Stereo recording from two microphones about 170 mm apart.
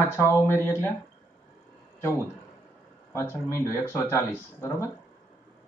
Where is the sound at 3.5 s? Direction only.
15° left (ahead or behind).